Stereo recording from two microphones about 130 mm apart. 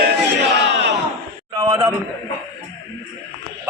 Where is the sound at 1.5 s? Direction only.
35° right (ahead or behind).